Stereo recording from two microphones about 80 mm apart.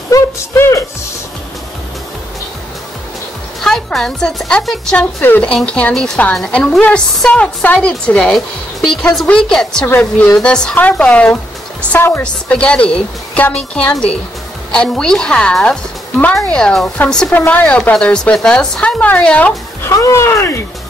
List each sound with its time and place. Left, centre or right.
0.6 s speech: left
3.6 s speech: centre
4.9 s a woman's voice: left
11.9 s speech: left
12.2 s a woman's voice: centre
19.8 s speech: left